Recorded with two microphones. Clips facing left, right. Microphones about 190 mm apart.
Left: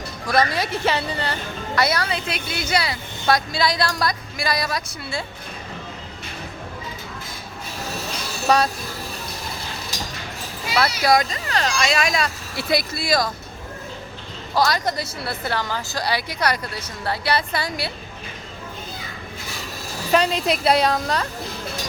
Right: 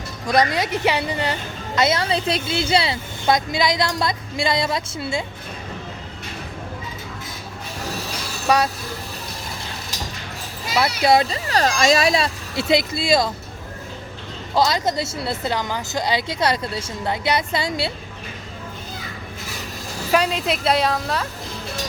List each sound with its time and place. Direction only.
0.3 s a woman's voice: 20° right (ahead or behind)
8.4 s speech: 10° right (ahead or behind)
11.0 s a woman's voice: 30° right (ahead or behind)
14.5 s a woman's voice: 20° right (ahead or behind)
20.1 s a woman's voice: 5° right (ahead or behind)